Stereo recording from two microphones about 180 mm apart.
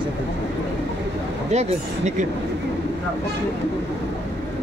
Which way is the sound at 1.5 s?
40° right (ahead or behind).